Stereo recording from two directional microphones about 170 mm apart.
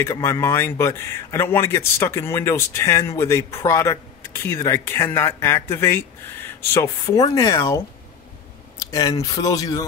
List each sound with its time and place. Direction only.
0.0 s a man's voice: 15° left (ahead or behind)
8.9 s speech: 20° left (ahead or behind)